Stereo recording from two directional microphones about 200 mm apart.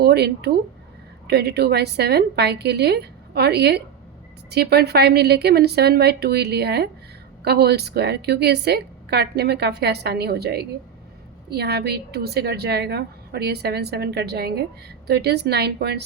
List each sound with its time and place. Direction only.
0.0 s a woman's voice: 55° right (ahead or behind)